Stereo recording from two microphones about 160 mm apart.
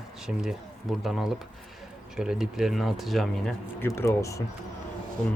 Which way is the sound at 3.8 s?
15° left (ahead or behind).